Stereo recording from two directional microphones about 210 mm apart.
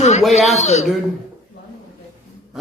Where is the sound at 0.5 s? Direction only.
30° left (ahead or behind).